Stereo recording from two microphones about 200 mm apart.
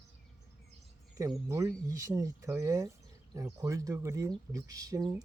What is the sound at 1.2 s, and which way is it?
Speech, 15° right (ahead or behind).